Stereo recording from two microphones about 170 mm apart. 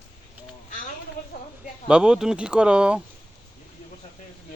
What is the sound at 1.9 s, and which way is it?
Speech, 5° right (ahead or behind).